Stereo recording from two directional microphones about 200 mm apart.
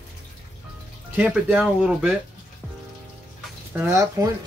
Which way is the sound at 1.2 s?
5° right (ahead or behind).